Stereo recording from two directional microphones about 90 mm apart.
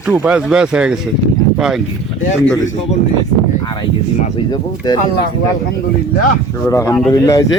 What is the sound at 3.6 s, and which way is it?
Speech, 55° left (ahead or behind).